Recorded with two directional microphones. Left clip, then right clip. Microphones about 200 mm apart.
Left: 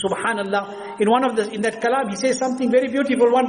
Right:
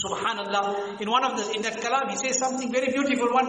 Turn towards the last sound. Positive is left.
turn(degrees=35)  # may be behind; listen again after turning